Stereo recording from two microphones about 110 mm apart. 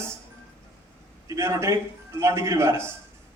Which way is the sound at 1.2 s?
25° right (ahead or behind).